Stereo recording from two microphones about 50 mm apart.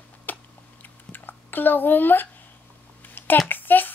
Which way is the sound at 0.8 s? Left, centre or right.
Left.